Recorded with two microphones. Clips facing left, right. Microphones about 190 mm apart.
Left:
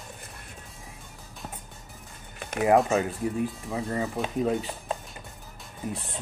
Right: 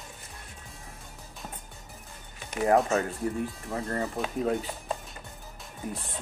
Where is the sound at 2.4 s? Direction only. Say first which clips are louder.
Left 3 dB; 60° left (ahead or behind).